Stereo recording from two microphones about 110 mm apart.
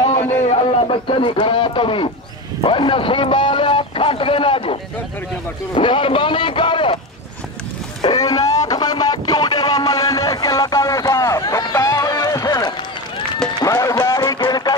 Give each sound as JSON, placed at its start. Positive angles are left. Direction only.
{"t": 0.4, "sound": "a man's voice", "side_deg": 60}
{"t": 5.8, "sound": "a man's voice", "side_deg": 50}
{"t": 8.0, "sound": "a sound", "side_deg": 40}
{"t": 11.7, "sound": "run", "side_deg": 30}
{"t": 14.4, "sound": "music", "side_deg": 40}